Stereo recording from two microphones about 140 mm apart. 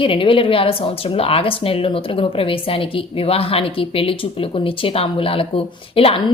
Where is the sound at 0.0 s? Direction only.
40° left (ahead or behind).